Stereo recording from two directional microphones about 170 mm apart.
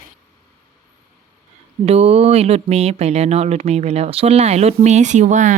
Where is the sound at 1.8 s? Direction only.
35° right (ahead or behind).